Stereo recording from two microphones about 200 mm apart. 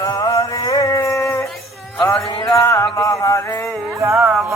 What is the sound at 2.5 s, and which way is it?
Music, 15° left (ahead or behind).